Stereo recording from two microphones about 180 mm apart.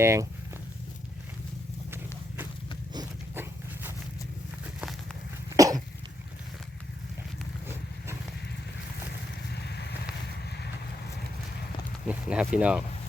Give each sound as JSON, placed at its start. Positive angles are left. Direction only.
{"t": 0.0, "sound": "speech", "side_deg": -15}
{"t": 2.9, "sound": "clip-clop", "side_deg": -20}
{"t": 5.5, "sound": "cough", "side_deg": -20}
{"t": 9.5, "sound": "a sound", "side_deg": 70}
{"t": 12.0, "sound": "speech", "side_deg": -5}